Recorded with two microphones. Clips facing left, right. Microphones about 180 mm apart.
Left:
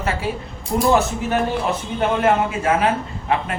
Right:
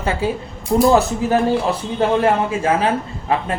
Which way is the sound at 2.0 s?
30° right (ahead or behind).